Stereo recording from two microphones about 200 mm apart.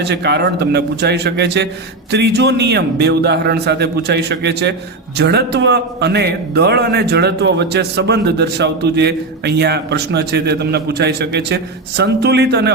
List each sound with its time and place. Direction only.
0.0 s a man's voice: 55° right (ahead or behind)